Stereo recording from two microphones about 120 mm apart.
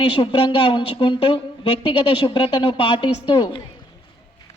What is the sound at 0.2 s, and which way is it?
A woman's voice, 45° left (ahead or behind).